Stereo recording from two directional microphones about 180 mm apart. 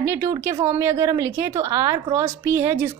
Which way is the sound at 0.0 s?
15° right (ahead or behind).